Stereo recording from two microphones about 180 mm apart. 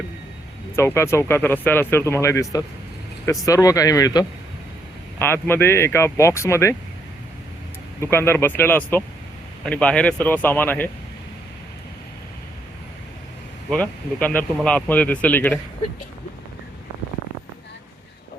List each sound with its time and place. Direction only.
0.8 s speech: 15° left (ahead or behind)
8.0 s speech: 15° left (ahead or behind)
13.7 s speech: 5° left (ahead or behind)